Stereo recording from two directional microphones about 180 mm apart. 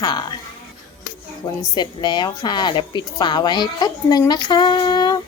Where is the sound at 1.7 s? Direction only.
25° left (ahead or behind).